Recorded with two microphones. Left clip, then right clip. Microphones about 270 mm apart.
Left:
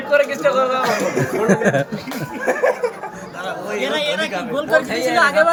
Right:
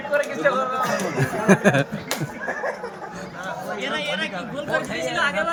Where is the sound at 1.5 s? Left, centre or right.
Centre.